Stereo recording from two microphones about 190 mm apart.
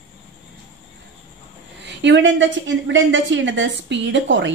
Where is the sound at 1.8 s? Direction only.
65° right (ahead or behind).